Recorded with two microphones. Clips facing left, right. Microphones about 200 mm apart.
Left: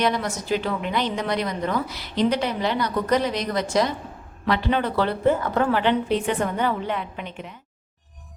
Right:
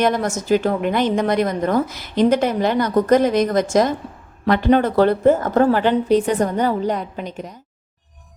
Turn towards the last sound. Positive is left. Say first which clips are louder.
# right 5 dB
turn(degrees=-40)  # may be behind; listen again after turning